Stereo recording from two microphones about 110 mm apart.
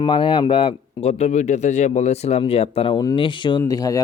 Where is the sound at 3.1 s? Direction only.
50° left (ahead or behind); by 4.0 s 35° left (ahead or behind).